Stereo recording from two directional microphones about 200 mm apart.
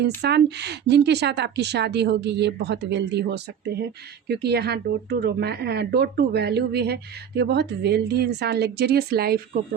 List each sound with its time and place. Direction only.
0.2 s speech: 55° right (ahead or behind)